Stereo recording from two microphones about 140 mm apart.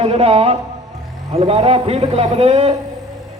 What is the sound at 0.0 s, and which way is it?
A man's voice, 45° right (ahead or behind).